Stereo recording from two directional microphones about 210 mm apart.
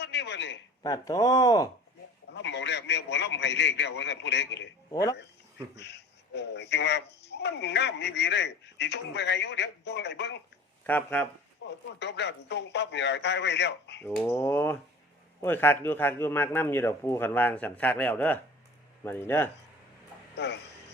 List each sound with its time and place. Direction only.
0.0 s a man's voice: 55° left (ahead or behind)
0.8 s speech: 15° left (ahead or behind)
2.3 s speech: 55° left (ahead or behind)
4.9 s speech: 15° left (ahead or behind)
5.7 s speech: 55° left (ahead or behind)
10.8 s speech: 5° left (ahead or behind)
11.6 s speech: 60° left (ahead or behind)
14.0 s speech: 10° left (ahead or behind)
20.3 s a man's voice: 55° left (ahead or behind)